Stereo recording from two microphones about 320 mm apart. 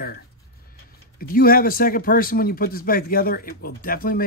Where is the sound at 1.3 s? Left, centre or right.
Left.